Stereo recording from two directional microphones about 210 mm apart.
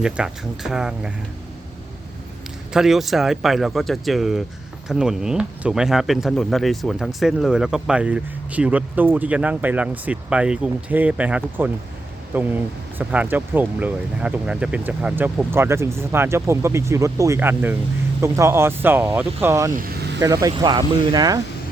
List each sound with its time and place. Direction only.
0.0 s speech: 5° right (ahead or behind)
2.7 s speech: centre (ahead or behind)
19.7 s vehicle: 45° right (ahead or behind)
20.1 s speech: 15° right (ahead or behind)